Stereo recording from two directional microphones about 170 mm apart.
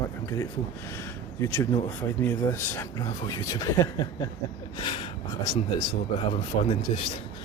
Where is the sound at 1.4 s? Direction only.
10° left (ahead or behind).